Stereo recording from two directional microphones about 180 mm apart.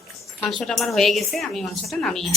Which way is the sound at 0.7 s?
Centre (ahead or behind).